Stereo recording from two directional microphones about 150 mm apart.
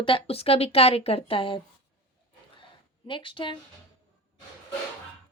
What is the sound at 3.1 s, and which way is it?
Speech, 35° left (ahead or behind).